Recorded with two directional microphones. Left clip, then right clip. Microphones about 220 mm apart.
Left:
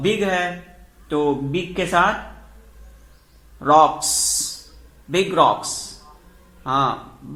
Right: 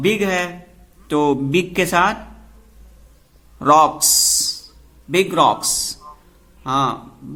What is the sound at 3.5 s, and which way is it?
A man's voice, 30° right (ahead or behind).